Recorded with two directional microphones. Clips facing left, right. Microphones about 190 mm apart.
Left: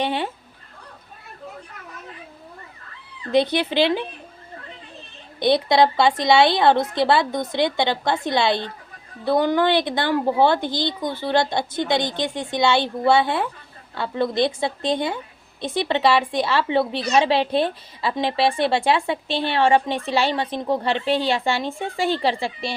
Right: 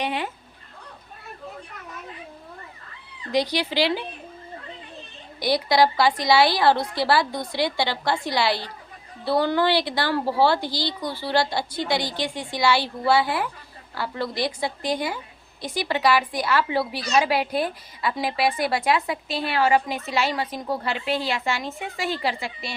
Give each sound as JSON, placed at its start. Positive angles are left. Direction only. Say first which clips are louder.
{"t": 0.0, "sound": "speech", "louder": "left 3 dB", "side_deg": 30}
{"t": 3.3, "sound": "a woman's voice", "louder": "left 4 dB", "side_deg": 25}
{"t": 5.4, "sound": "a woman's voice", "louder": "left 3 dB", "side_deg": 25}